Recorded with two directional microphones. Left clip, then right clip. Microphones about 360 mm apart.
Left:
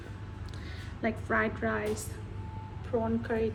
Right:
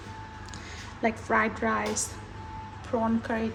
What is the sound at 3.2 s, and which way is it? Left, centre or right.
Speech, centre.